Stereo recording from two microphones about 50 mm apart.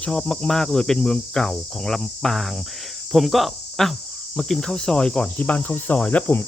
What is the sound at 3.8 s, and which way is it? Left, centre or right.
Cricket, centre.